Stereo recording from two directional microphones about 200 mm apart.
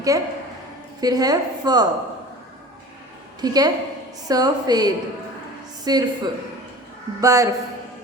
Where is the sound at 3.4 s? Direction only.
20° right (ahead or behind).